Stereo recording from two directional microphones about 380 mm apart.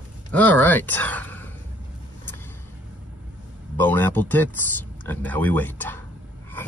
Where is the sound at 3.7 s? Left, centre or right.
Centre.